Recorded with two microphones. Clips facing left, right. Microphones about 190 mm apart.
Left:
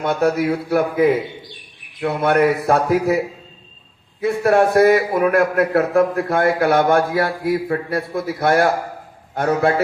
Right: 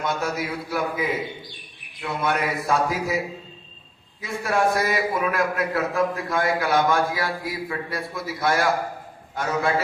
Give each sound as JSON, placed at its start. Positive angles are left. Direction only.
{"t": 0.0, "sound": "a man's voice", "side_deg": 60}
{"t": 4.2, "sound": "a man's voice", "side_deg": 60}